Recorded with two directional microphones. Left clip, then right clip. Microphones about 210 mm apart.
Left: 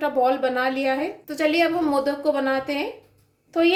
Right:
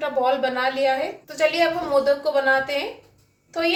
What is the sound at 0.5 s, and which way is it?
Speech, 45° left (ahead or behind).